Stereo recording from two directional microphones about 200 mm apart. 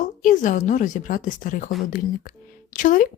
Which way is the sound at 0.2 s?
40° left (ahead or behind).